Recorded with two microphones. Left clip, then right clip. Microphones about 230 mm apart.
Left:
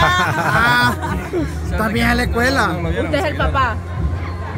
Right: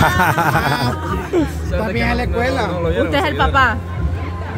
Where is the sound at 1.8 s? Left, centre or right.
Left.